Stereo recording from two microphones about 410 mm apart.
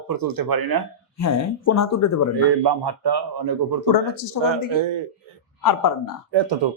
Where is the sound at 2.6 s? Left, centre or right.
Right.